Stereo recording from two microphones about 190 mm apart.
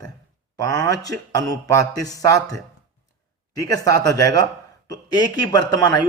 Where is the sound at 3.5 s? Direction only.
20° left (ahead or behind).